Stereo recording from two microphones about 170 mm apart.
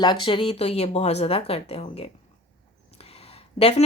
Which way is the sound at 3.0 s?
35° left (ahead or behind).